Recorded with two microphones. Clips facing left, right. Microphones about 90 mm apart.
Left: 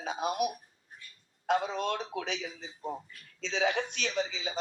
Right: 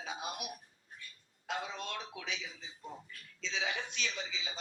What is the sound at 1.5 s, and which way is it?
Speech, 50° left (ahead or behind).